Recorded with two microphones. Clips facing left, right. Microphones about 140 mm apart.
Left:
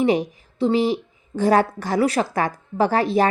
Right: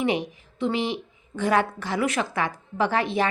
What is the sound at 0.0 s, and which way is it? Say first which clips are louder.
A woman's voice: left 6 dB; 35° left (ahead or behind).